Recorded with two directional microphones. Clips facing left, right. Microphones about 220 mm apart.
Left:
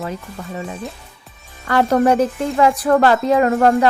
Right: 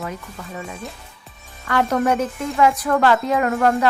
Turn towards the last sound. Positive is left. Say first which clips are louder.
# left 4 dB
turn(degrees=30)  # may be behind; listen again after turning